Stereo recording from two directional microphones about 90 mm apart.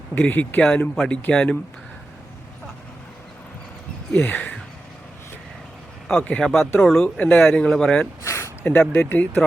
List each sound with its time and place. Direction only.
0.1 s speech: 20° left (ahead or behind)
4.2 s speech: 15° left (ahead or behind)
6.1 s speech: 10° left (ahead or behind)
8.2 s a sound: 35° left (ahead or behind)
8.6 s speech: 20° left (ahead or behind)